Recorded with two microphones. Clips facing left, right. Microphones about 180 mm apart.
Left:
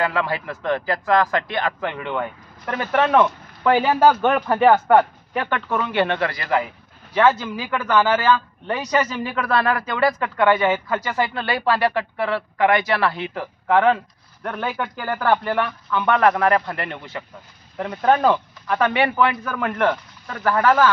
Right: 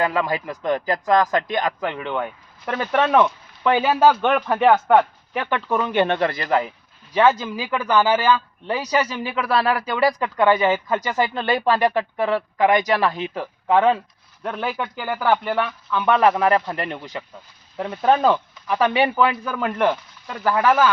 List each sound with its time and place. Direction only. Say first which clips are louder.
0.0 s speech: right 1 dB; 15° right (ahead or behind)
3.2 s a sound: even; centre (ahead or behind)
4.2 s speech: left 1 dB; 10° left (ahead or behind)
5.5 s speech: right 2 dB; 15° right (ahead or behind)
17.7 s speech: even; 5° right (ahead or behind)